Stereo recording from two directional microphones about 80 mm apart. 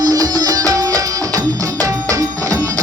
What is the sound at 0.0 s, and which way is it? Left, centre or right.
Music, right.